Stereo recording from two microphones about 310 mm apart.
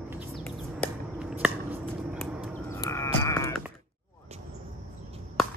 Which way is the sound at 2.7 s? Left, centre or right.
Centre.